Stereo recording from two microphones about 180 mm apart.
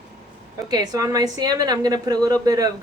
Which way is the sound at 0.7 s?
20° right (ahead or behind).